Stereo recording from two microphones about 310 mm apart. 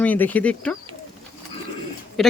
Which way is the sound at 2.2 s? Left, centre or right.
Centre.